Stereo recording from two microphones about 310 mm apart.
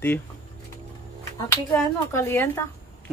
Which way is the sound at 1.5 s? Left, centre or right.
Centre.